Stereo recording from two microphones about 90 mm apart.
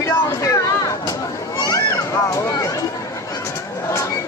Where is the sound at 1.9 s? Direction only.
35° left (ahead or behind).